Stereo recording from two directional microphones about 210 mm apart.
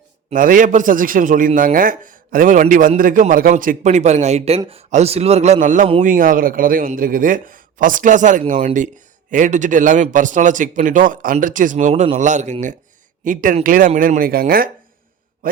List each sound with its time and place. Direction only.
0.3 s a man's voice: 40° right (ahead or behind)